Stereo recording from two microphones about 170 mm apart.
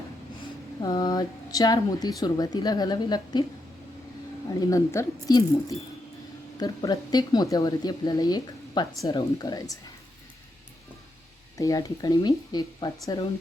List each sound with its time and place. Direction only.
0.8 s speech: 25° left (ahead or behind)
4.6 s speech: 20° left (ahead or behind)
11.5 s speech: 20° left (ahead or behind)